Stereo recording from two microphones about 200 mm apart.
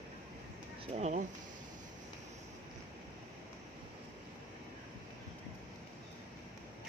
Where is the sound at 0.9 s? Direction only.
35° right (ahead or behind).